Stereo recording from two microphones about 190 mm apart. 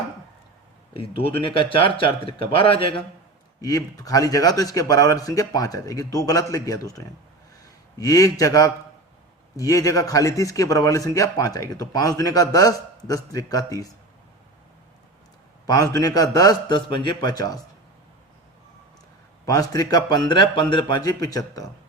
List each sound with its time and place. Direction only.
0.9 s speech: 30° left (ahead or behind)
3.6 s a man's voice: 20° left (ahead or behind)
15.6 s a man's voice: 20° left (ahead or behind)
19.5 s speech: 20° left (ahead or behind)